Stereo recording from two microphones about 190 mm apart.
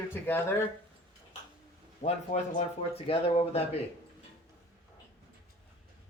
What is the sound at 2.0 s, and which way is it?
Speech, 35° left (ahead or behind).